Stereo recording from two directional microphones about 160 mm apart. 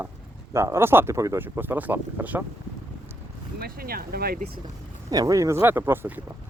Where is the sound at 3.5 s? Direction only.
70° right (ahead or behind).